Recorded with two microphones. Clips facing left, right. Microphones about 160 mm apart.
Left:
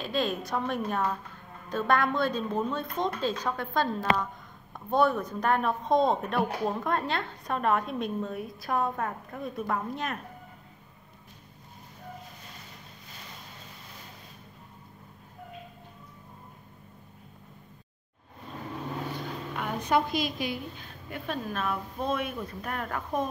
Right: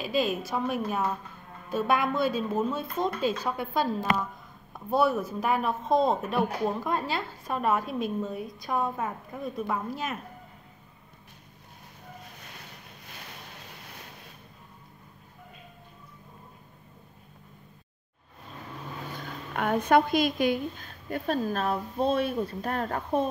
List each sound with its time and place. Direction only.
0.0 s a woman's voice: 5° right (ahead or behind)
19.1 s a sound: 55° right (ahead or behind)
21.1 s speech: 40° right (ahead or behind)